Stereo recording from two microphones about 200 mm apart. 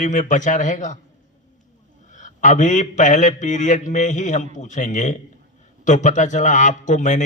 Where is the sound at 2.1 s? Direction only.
35° left (ahead or behind).